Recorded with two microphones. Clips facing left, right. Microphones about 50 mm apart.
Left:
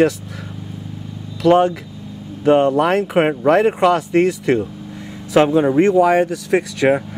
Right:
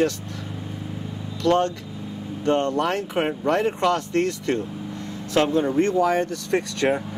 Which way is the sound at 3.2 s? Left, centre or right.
Left.